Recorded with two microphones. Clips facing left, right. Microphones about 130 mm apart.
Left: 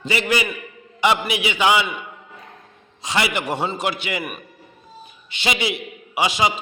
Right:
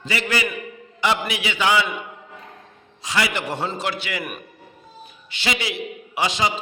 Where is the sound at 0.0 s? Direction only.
20° left (ahead or behind).